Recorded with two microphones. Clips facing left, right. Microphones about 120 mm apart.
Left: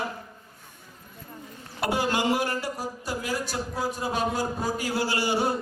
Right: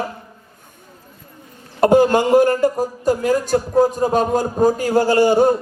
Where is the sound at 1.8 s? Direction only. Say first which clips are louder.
Right 13 dB; 45° right (ahead or behind).